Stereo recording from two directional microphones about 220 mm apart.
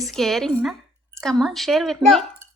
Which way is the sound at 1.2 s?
Centre (ahead or behind).